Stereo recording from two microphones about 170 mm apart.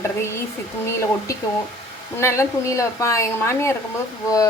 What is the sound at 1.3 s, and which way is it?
Speech, 20° left (ahead or behind).